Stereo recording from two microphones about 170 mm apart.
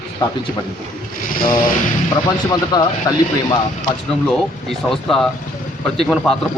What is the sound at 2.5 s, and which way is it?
Speech, 25° left (ahead or behind).